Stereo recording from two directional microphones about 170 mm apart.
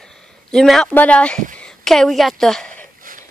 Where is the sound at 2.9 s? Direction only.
55° right (ahead or behind).